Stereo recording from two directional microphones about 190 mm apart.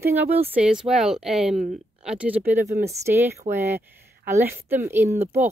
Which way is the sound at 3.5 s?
40° right (ahead or behind).